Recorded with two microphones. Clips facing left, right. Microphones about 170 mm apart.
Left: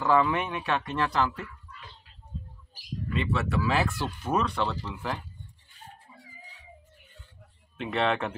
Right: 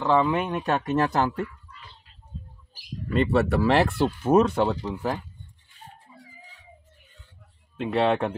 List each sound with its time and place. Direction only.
0.0 s speech: 30° right (ahead or behind); by 1.5 s 50° right (ahead or behind)
3.1 s speech: 40° right (ahead or behind)
3.6 s speech: 65° right (ahead or behind)
4.3 s speech: 45° right (ahead or behind)
7.9 s speech: 30° right (ahead or behind)